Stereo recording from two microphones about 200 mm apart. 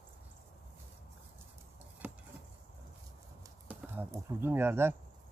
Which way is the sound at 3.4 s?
10° right (ahead or behind).